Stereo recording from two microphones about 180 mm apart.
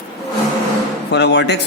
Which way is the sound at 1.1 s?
70° left (ahead or behind).